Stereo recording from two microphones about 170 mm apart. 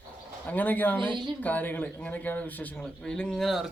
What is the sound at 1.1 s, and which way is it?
Speech, 30° right (ahead or behind).